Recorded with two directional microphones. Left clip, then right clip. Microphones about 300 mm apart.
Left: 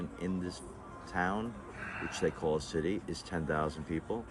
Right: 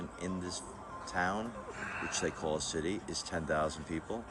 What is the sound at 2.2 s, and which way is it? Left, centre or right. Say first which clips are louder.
Speech: left 4 dB; left.